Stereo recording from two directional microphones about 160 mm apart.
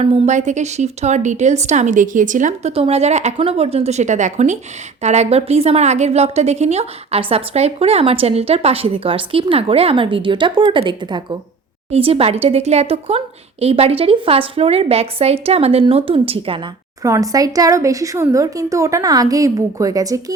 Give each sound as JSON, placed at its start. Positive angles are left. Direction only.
{"t": 0.0, "sound": "a woman's voice", "side_deg": -50}
{"t": 17.0, "sound": "speech", "side_deg": -20}